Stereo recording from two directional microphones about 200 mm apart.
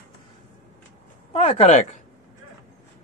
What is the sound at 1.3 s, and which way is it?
Speech, 30° left (ahead or behind).